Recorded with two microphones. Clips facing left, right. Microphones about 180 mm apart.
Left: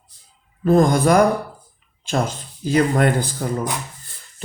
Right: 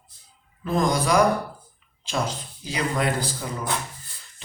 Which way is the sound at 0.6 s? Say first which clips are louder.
Left 8 dB; 50° left (ahead or behind).